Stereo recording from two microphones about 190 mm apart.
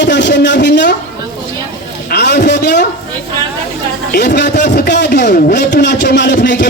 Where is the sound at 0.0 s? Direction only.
65° left (ahead or behind).